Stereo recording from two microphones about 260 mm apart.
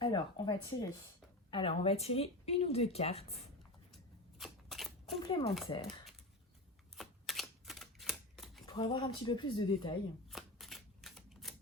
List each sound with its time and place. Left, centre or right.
0.0 s speech: centre
4.4 s shuffling cards: centre
5.3 s speech: centre
6.9 s typewriter: centre
8.6 s speech: centre
10.2 s shuffling cards: centre